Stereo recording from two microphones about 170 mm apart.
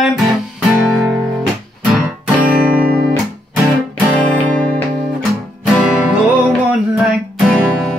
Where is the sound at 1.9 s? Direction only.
5° right (ahead or behind).